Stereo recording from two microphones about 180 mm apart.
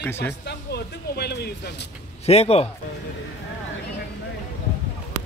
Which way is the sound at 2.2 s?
35° left (ahead or behind).